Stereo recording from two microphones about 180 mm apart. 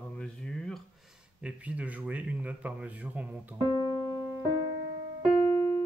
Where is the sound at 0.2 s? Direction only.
5° left (ahead or behind).